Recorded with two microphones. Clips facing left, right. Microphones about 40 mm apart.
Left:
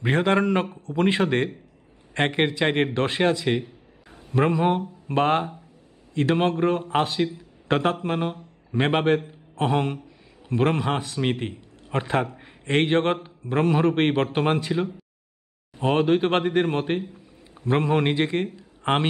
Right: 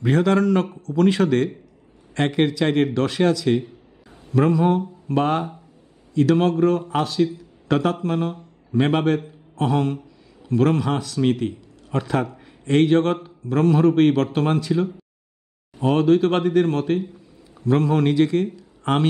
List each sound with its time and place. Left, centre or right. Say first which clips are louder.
0.0 s a man's voice: right 3 dB; left